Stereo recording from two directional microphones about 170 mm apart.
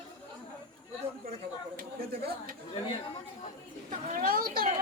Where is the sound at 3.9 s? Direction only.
50° right (ahead or behind).